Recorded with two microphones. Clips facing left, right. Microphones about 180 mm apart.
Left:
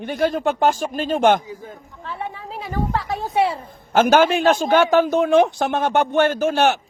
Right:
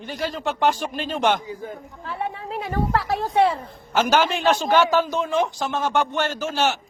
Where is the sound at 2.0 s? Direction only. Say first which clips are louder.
Right 1 dB; centre (ahead or behind).